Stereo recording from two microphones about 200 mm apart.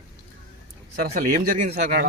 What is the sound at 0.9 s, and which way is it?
A man's voice, 50° right (ahead or behind).